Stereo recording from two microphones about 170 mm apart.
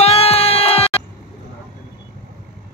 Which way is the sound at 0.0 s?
35° left (ahead or behind).